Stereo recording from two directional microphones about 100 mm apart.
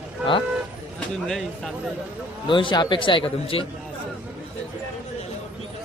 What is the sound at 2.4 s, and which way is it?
A man's voice, 55° left (ahead or behind).